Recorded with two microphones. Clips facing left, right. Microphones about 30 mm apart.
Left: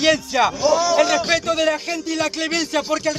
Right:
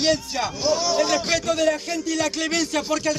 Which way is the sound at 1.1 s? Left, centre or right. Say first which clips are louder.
Left 3 dB; left.